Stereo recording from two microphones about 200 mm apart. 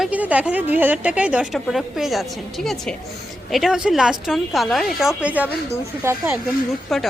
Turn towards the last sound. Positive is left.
turn(degrees=0)  # may be behind; listen again after turning